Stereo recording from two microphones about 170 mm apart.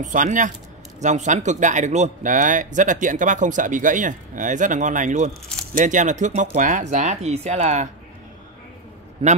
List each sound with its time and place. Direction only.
0.0 s speech: 50° right (ahead or behind)
9.2 s a man's voice: 35° right (ahead or behind)